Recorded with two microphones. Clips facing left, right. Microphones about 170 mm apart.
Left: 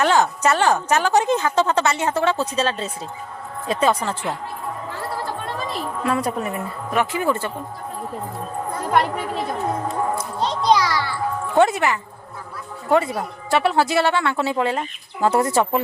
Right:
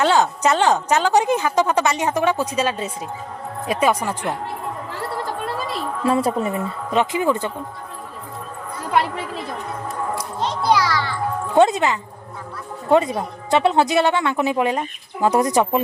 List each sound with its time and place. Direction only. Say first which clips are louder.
0.0 s a woman's voice: right 1 dB; 15° right (ahead or behind)
6.1 s speech: right 4 dB; 25° right (ahead or behind)
8.9 s a woman's voice: even; 5° right (ahead or behind)
10.6 s music: even; 15° left (ahead or behind)
11.4 s speech: right 2 dB; 20° right (ahead or behind)